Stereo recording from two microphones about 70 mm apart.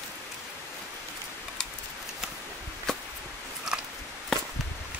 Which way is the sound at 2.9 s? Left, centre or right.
Centre.